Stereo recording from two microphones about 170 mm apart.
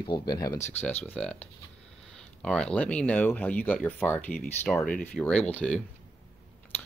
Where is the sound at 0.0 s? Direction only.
25° left (ahead or behind).